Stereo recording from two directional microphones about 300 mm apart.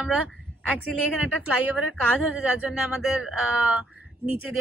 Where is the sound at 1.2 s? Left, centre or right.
Centre.